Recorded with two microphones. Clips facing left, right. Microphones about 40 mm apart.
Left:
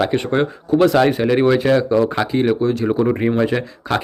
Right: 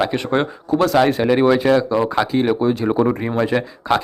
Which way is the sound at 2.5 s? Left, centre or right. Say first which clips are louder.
Even; centre.